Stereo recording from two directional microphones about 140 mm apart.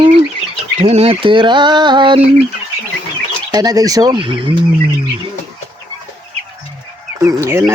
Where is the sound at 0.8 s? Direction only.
45° right (ahead or behind).